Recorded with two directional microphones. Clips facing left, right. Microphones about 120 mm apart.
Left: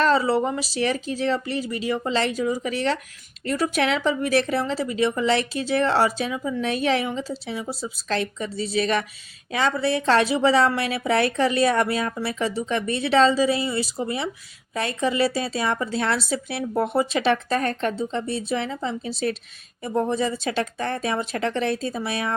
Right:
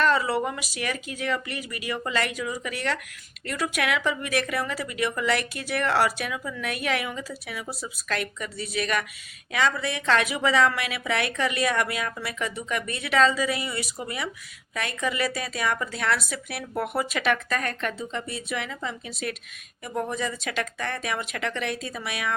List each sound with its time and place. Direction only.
0.0 s a woman's voice: 30° left (ahead or behind)